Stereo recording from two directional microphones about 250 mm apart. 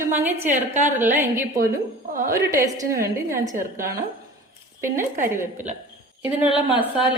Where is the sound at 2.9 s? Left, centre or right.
Right.